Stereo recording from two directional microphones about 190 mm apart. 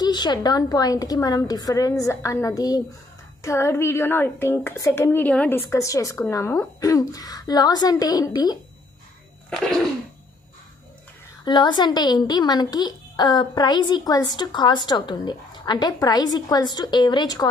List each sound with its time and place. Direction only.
0.0 s a woman's voice: 20° left (ahead or behind)
9.5 s a sound: centre (ahead or behind)
11.4 s a woman's voice: 25° left (ahead or behind)